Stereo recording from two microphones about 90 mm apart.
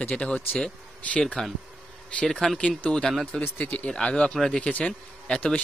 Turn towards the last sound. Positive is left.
turn(degrees=15)  # may be behind; listen again after turning